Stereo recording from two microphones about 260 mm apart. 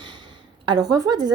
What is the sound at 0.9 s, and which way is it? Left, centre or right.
Speech, centre.